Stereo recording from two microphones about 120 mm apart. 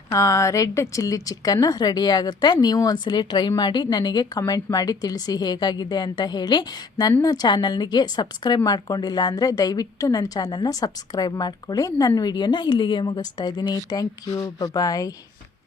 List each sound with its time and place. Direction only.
0.1 s a woman's voice: 25° left (ahead or behind)